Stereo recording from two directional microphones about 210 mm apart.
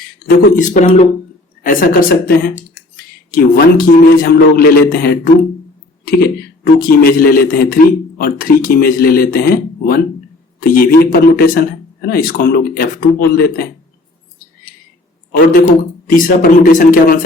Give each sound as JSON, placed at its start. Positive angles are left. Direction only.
{"t": 0.3, "sound": "a man's voice", "side_deg": 35}
{"t": 6.7, "sound": "a man's voice", "side_deg": 45}
{"t": 15.3, "sound": "speech", "side_deg": 40}